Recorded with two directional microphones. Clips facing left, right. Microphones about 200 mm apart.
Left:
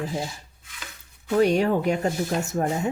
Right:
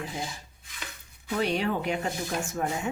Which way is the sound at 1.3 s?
45° left (ahead or behind).